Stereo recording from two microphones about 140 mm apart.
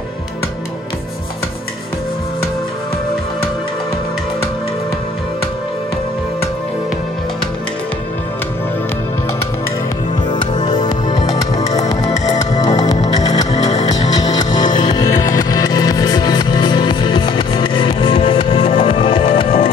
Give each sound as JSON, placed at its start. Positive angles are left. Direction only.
{"t": 10.5, "sound": "music", "side_deg": 30}